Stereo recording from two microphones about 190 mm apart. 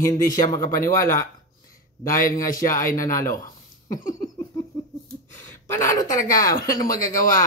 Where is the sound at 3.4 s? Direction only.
20° left (ahead or behind).